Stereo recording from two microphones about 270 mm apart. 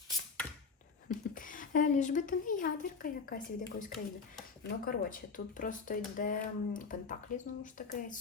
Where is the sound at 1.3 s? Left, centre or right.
Left.